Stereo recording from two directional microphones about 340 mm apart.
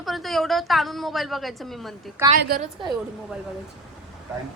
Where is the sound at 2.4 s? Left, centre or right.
Right.